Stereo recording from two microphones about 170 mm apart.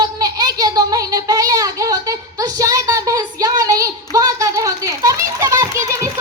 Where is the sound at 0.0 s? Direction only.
25° right (ahead or behind).